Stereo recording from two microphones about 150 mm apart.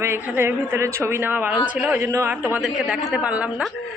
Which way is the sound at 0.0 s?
15° right (ahead or behind).